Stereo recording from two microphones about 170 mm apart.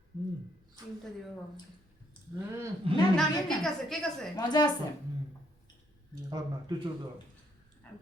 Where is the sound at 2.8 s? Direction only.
35° right (ahead or behind).